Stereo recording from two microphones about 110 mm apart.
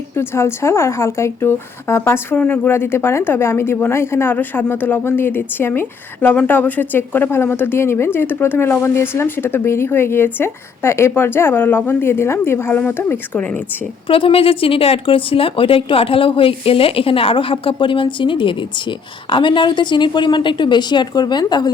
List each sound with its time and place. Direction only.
0.2 s speech: 25° left (ahead or behind)
14.1 s speech: 55° left (ahead or behind)